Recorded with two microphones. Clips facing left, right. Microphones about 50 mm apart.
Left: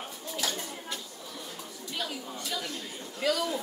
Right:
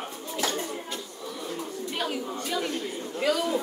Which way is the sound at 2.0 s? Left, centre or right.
Right.